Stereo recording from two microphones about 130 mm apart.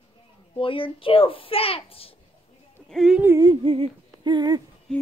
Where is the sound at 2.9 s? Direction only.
Centre (ahead or behind).